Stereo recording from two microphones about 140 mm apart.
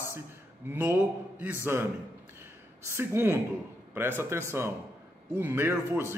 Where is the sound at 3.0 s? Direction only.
15° right (ahead or behind).